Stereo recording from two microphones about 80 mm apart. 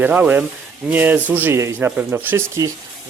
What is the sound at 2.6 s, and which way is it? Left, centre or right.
Speech, right.